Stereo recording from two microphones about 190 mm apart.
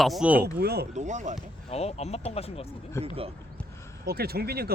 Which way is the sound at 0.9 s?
40° right (ahead or behind).